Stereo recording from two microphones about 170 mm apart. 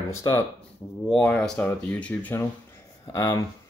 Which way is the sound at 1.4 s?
5° left (ahead or behind).